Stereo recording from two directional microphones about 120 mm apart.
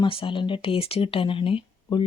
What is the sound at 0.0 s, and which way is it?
Speech, 45° left (ahead or behind).